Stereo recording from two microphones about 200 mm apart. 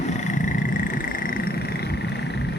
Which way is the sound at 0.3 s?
40° left (ahead or behind).